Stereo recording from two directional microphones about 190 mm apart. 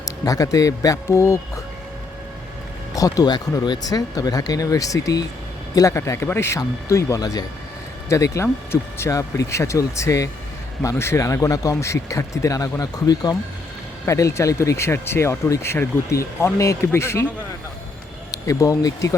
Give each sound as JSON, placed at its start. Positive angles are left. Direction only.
{"t": 0.0, "sound": "speech", "side_deg": 15}
{"t": 2.9, "sound": "speech", "side_deg": 20}
{"t": 18.3, "sound": "speech", "side_deg": 20}